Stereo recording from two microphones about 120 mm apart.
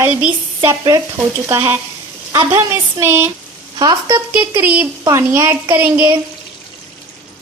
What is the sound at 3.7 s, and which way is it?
Speech, 35° right (ahead or behind).